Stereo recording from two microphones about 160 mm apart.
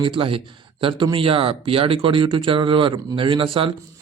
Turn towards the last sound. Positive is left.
turn(degrees=-35)  # may be behind; listen again after turning